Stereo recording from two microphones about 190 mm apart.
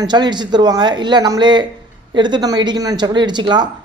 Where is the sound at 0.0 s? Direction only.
25° right (ahead or behind).